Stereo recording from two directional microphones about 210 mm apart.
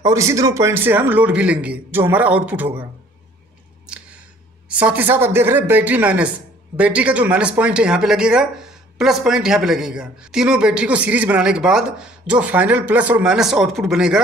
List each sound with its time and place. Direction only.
0.0 s a man's voice: 15° right (ahead or behind)
3.8 s a sound: 5° right (ahead or behind)
4.6 s a man's voice: 5° right (ahead or behind)